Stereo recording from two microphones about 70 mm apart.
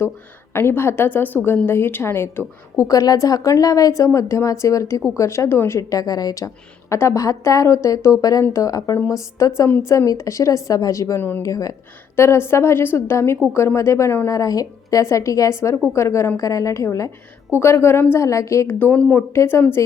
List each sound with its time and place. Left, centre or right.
0.5 s a woman's voice: left
2.8 s a woman's voice: left
5.9 s speech: left
6.9 s a woman's voice: left
11.2 s a woman's voice: left
11.4 s speech: left
12.1 s a woman's voice: left
14.3 s a woman's voice: left
16.4 s a woman's voice: left
18.1 s a woman's voice: left
18.7 s a woman's voice: left